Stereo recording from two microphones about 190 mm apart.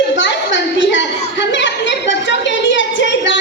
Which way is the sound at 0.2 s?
70° left (ahead or behind).